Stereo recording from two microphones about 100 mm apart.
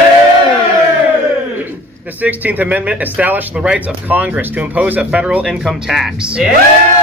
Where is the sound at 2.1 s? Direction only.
15° right (ahead or behind).